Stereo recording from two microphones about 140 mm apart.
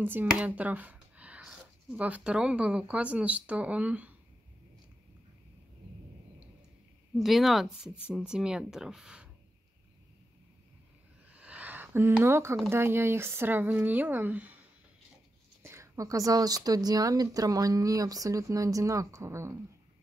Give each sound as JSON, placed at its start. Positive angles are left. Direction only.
{"t": 0.0, "sound": "speech", "side_deg": -15}
{"t": 7.2, "sound": "speech", "side_deg": 0}
{"t": 11.3, "sound": "a sound", "side_deg": -10}
{"t": 12.6, "sound": "speech", "side_deg": -15}
{"t": 15.6, "sound": "speech", "side_deg": -20}